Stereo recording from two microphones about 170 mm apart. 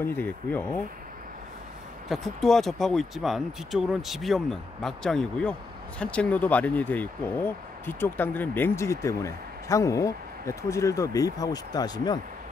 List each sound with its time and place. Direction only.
0.0 s speech: 10° left (ahead or behind)
2.0 s speech: centre (ahead or behind); by 12.2 s 25° left (ahead or behind)